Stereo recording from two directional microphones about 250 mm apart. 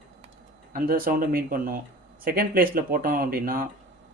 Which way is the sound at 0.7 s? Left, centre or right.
Right.